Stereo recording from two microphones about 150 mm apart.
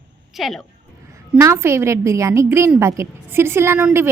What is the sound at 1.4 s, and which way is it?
A woman's voice, 20° right (ahead or behind).